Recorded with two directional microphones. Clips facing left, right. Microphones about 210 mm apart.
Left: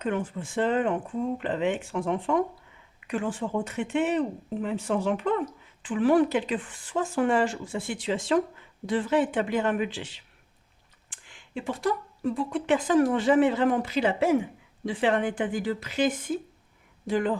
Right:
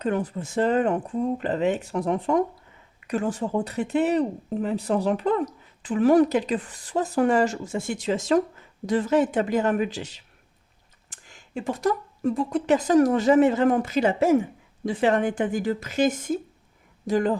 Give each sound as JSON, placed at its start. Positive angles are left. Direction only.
{"t": 0.0, "sound": "speech", "side_deg": -40}